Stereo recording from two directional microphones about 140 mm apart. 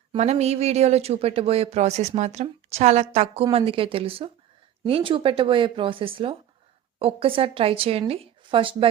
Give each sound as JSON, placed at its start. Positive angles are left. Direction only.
{"t": 0.2, "sound": "a woman's voice", "side_deg": -50}